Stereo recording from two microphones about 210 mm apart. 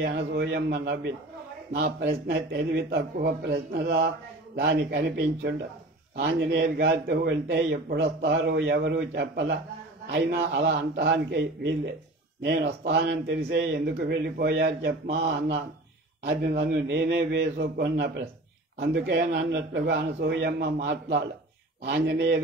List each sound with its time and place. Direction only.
0.0 s a man's voice: 55° right (ahead or behind)